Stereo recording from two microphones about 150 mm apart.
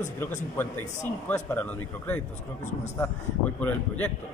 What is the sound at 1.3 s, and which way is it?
Speech, 10° left (ahead or behind).